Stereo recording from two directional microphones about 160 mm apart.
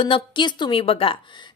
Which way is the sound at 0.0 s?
30° left (ahead or behind).